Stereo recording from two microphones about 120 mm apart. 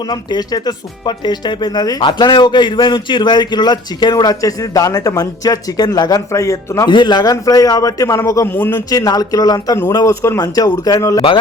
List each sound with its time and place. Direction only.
0.1 s speech: 35° left (ahead or behind)
6.8 s a man's voice: 40° left (ahead or behind); by 8.8 s 15° left (ahead or behind)
8.9 s a man's voice: 30° left (ahead or behind)